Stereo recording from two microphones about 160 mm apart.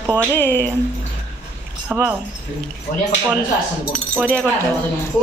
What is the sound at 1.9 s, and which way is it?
Speech, 10° right (ahead or behind).